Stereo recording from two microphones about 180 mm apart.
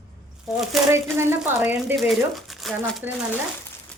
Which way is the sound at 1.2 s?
15° right (ahead or behind).